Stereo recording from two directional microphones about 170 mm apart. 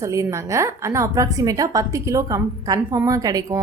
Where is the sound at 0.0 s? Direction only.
20° right (ahead or behind).